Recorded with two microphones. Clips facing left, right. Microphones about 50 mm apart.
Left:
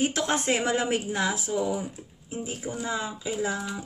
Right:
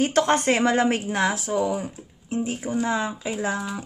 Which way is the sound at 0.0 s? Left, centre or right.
Right.